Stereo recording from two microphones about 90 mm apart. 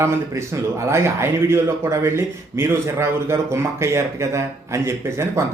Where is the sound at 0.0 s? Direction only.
30° right (ahead or behind).